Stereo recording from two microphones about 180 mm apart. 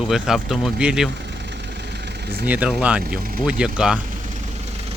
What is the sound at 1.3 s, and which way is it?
Vehicle, 70° right (ahead or behind).